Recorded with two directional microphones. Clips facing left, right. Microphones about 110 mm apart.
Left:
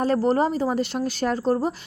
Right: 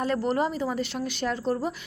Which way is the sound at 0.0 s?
40° left (ahead or behind).